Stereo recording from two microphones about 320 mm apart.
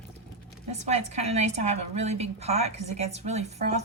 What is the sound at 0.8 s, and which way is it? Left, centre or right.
A woman's voice, right.